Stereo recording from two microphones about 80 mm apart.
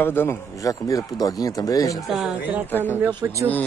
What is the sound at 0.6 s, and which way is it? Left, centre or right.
Speech, left.